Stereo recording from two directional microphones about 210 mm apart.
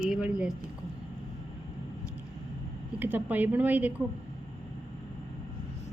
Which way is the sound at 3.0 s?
10° right (ahead or behind).